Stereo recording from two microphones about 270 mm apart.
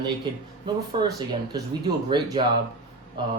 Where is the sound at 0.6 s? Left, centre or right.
Centre.